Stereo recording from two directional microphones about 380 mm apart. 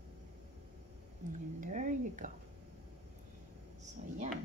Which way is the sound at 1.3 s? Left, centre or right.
Centre.